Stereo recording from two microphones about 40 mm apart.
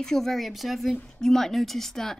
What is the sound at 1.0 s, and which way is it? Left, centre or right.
Speech, centre.